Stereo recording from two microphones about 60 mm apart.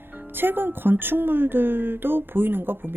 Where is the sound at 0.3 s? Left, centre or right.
Right.